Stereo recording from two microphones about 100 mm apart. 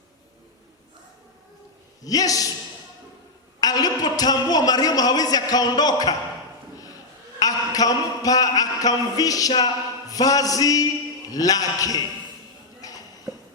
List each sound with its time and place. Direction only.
2.0 s a woman's voice: 35° left (ahead or behind)
3.6 s a woman's voice: 40° left (ahead or behind)
7.3 s a woman's voice: 40° left (ahead or behind)
12.8 s a sound: 35° left (ahead or behind)